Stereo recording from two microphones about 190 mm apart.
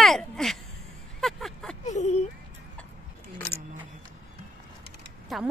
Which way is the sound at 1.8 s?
40° left (ahead or behind).